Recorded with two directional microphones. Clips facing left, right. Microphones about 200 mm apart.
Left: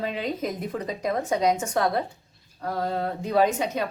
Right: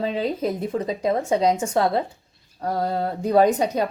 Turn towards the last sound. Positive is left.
turn(degrees=-40)  # may be behind; listen again after turning